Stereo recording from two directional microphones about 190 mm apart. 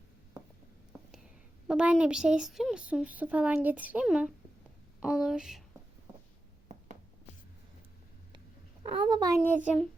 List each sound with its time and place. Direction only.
1.6 s a woman's voice: 5° right (ahead or behind)
8.8 s a child's voice: 25° right (ahead or behind)